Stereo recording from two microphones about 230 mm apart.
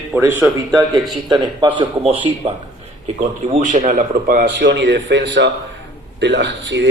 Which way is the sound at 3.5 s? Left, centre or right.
Right.